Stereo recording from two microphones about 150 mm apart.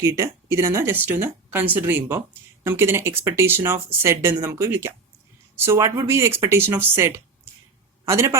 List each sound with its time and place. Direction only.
0.0 s a man's voice: 20° right (ahead or behind)